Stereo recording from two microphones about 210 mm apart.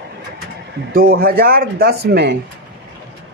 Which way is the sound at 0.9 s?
45° right (ahead or behind).